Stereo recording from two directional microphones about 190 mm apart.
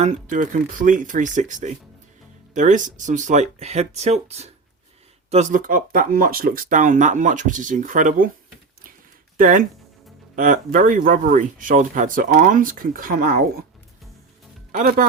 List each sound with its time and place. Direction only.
0.0 s speech: 40° right (ahead or behind)
9.4 s speech: 45° right (ahead or behind)
14.7 s speech: 45° right (ahead or behind)